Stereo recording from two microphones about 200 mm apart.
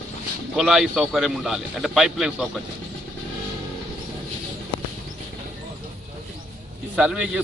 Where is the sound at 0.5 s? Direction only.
5° right (ahead or behind).